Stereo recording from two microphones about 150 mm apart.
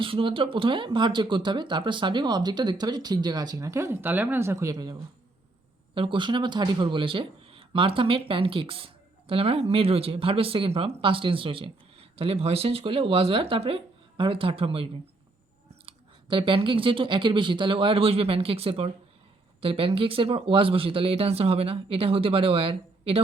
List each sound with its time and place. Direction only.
0.0 s speech: 35° right (ahead or behind)
15.9 s speech: 35° right (ahead or behind)